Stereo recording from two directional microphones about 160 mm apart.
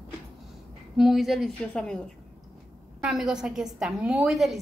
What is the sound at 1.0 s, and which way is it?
A woman's voice, centre (ahead or behind).